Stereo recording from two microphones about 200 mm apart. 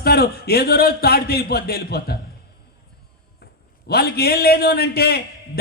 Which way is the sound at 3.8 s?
55° left (ahead or behind).